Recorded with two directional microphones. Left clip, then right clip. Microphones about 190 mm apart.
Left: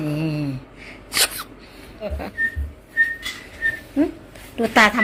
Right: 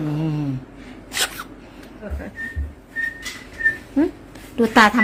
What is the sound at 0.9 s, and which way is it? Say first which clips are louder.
Sneeze: left 3 dB; 15° right (ahead or behind).